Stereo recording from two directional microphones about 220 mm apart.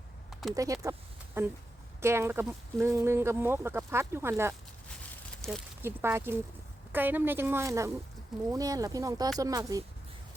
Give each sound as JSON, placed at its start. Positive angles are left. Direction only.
{"t": 0.5, "sound": "speech", "side_deg": -15}
{"t": 5.4, "sound": "a sound", "side_deg": 5}
{"t": 5.8, "sound": "speech", "side_deg": -10}